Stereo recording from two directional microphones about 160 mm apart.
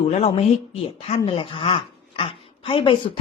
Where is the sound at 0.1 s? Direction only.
40° left (ahead or behind).